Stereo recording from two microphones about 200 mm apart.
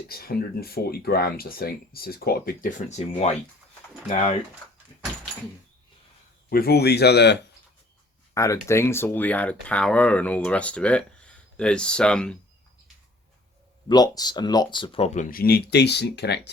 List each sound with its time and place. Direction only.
0.1 s speech: 50° left (ahead or behind); by 4.4 s 35° left (ahead or behind)
6.5 s speech: 50° left (ahead or behind)
8.4 s speech: 15° left (ahead or behind)
13.8 s speech: 20° left (ahead or behind); by 16.5 s 55° left (ahead or behind)